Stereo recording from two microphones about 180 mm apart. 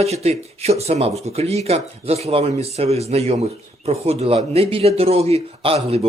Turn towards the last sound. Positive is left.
turn(degrees=-35)  # may be behind; listen again after turning